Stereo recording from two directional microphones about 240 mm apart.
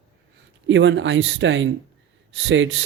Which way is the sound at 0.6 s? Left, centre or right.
Right.